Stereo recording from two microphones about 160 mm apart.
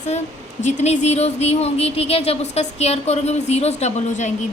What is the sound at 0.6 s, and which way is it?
A woman's voice, 45° left (ahead or behind).